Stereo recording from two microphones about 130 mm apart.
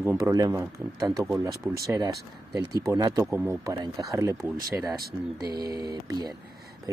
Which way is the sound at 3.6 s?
25° right (ahead or behind).